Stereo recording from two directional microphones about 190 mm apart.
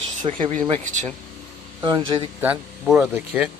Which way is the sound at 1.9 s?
25° right (ahead or behind).